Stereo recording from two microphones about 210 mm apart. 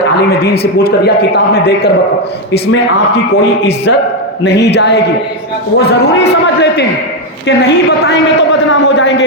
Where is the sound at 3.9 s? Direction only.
60° left (ahead or behind).